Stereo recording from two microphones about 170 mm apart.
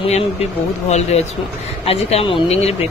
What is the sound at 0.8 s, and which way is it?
Speech, 40° left (ahead or behind).